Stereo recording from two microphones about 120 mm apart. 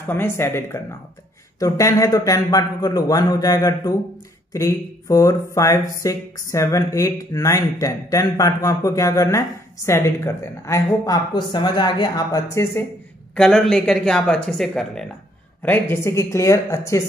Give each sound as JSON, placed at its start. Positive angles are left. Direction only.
{"t": 0.0, "sound": "a man's voice", "side_deg": 20}
{"t": 11.3, "sound": "a man's voice", "side_deg": 40}
{"t": 13.3, "sound": "speech", "side_deg": 5}
{"t": 15.6, "sound": "speech", "side_deg": 20}